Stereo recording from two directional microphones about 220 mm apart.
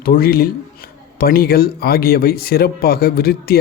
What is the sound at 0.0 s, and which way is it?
Speech, 40° left (ahead or behind).